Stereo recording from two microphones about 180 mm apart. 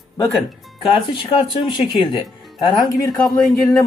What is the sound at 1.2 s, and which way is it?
Speech, 25° left (ahead or behind).